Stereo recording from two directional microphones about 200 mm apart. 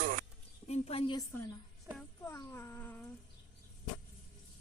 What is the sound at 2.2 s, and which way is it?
Speech, 15° left (ahead or behind).